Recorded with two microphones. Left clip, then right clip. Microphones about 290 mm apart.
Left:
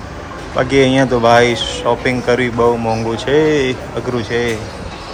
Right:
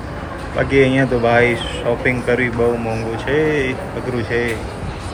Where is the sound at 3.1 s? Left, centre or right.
Left.